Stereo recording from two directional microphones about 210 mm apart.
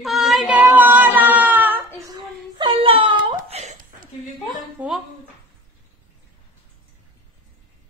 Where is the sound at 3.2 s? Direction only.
30° right (ahead or behind).